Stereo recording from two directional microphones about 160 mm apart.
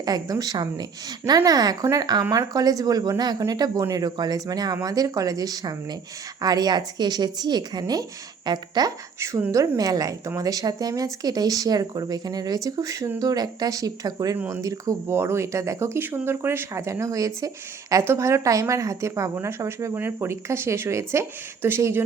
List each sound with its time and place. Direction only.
0.0 s a woman's voice: 25° right (ahead or behind)